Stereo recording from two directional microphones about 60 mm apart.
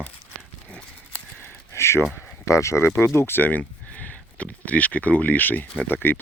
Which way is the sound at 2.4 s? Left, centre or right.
Left.